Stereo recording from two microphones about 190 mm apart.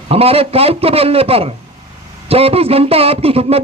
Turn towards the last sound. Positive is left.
turn(degrees=-30)  # may be behind; listen again after turning